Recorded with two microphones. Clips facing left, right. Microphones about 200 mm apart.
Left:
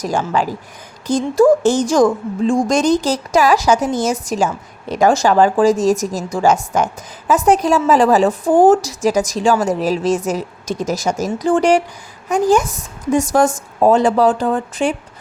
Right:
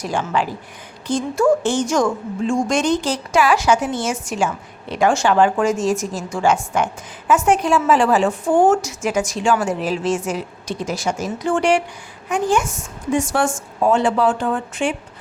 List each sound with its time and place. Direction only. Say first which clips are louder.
0.0 s a woman's voice: left 3 dB; 40° left (ahead or behind)